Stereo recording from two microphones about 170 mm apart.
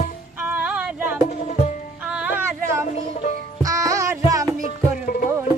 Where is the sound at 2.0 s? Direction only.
5° right (ahead or behind).